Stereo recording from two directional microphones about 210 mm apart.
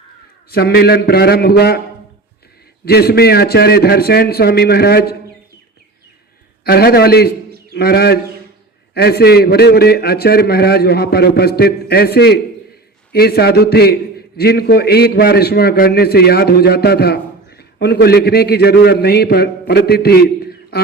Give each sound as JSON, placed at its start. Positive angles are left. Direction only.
{"t": 0.5, "sound": "a man's voice", "side_deg": 50}
{"t": 2.8, "sound": "a man's voice", "side_deg": 45}
{"t": 6.7, "sound": "a man's voice", "side_deg": 50}